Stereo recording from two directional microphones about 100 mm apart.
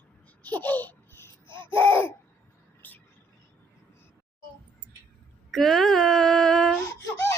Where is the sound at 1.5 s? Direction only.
55° right (ahead or behind).